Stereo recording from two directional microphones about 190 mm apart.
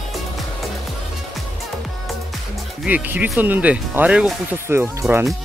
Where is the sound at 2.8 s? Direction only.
10° right (ahead or behind).